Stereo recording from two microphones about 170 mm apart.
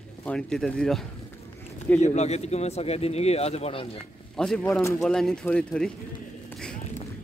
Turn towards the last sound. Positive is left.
turn(degrees=5)  # may be behind; listen again after turning